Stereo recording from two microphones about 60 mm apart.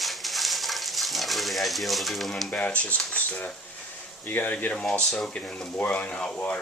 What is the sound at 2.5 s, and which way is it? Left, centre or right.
Speech, left.